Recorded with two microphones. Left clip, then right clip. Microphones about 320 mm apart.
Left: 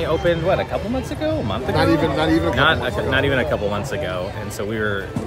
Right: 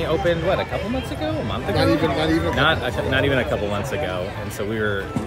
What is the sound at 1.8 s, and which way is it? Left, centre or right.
Speech, left.